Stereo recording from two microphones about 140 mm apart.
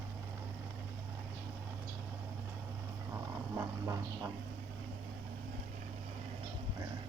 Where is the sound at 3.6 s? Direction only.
20° right (ahead or behind).